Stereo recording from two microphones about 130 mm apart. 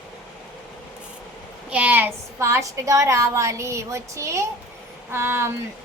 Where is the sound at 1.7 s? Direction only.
10° right (ahead or behind).